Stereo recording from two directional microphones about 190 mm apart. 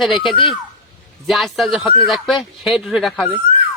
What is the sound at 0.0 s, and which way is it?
Speech, centre (ahead or behind).